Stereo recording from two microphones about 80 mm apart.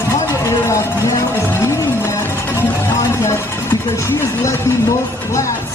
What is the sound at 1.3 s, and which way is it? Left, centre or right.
Music, left.